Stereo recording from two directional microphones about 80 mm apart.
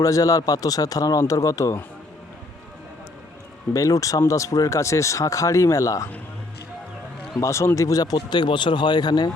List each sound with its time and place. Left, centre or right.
0.0 s speech: left
3.8 s speech: left
7.3 s speech: left